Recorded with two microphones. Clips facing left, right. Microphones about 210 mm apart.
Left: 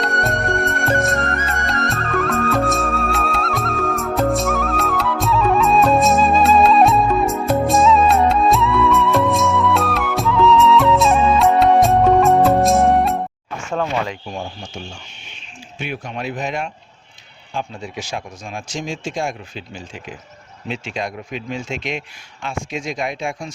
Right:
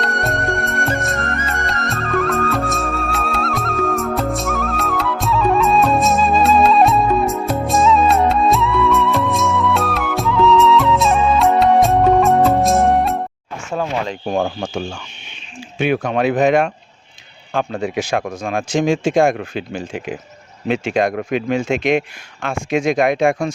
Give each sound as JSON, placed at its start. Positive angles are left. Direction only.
{"t": 0.0, "sound": "music", "side_deg": 0}
{"t": 14.3, "sound": "speech", "side_deg": -65}